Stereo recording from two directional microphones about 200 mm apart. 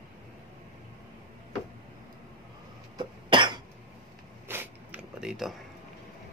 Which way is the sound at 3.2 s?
25° right (ahead or behind).